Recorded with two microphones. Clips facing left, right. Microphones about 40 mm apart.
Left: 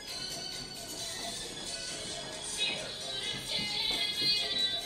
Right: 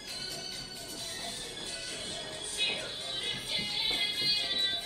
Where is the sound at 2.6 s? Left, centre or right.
Centre.